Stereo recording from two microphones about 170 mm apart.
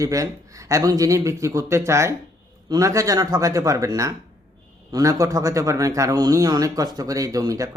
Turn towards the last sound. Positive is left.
turn(degrees=-20)  # may be behind; listen again after turning